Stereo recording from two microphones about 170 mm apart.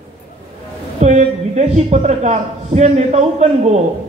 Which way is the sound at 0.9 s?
45° right (ahead or behind).